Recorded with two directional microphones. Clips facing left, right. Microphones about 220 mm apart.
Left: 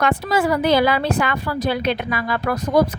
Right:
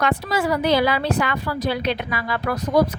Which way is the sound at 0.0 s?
50° left (ahead or behind).